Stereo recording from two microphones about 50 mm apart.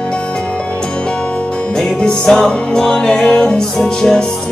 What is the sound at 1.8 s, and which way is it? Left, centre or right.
Music, centre.